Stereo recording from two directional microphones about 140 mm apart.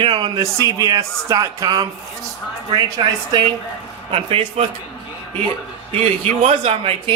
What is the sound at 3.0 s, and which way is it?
Speech, 35° right (ahead or behind).